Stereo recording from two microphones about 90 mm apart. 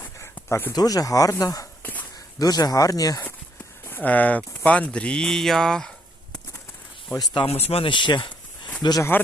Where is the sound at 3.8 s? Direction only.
20° left (ahead or behind).